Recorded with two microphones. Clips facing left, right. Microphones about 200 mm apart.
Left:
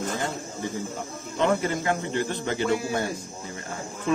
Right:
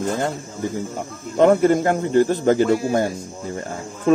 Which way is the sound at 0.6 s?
45° right (ahead or behind).